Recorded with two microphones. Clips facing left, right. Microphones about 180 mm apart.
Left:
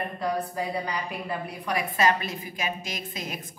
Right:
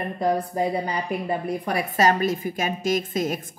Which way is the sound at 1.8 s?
45° right (ahead or behind).